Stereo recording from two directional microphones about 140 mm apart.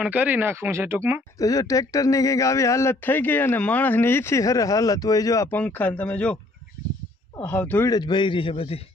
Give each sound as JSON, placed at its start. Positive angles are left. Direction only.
{"t": 0.0, "sound": "speech", "side_deg": -10}
{"t": 1.4, "sound": "speech", "side_deg": 25}
{"t": 5.5, "sound": "speech", "side_deg": 10}
{"t": 7.3, "sound": "speech", "side_deg": 10}
{"t": 7.9, "sound": "a man's voice", "side_deg": 30}